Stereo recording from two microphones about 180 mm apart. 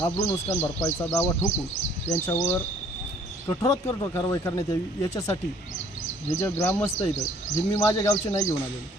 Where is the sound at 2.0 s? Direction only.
40° left (ahead or behind).